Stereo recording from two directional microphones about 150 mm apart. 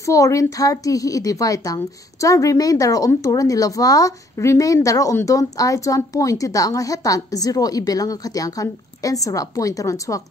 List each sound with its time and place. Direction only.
0.0 s a woman's voice: 20° left (ahead or behind)